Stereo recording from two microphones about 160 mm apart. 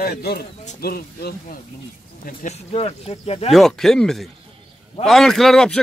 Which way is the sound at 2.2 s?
45° left (ahead or behind).